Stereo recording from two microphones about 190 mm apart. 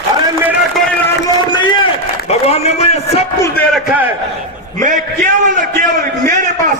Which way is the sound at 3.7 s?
10° right (ahead or behind).